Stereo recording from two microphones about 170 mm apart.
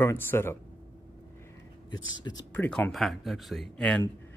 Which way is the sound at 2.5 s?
10° left (ahead or behind).